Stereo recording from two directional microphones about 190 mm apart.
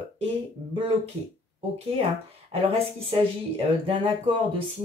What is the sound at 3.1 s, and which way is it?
Speech, 30° right (ahead or behind).